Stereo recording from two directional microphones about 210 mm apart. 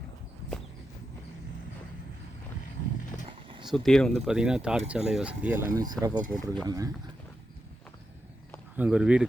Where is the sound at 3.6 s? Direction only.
Centre (ahead or behind); by 6.9 s 15° right (ahead or behind).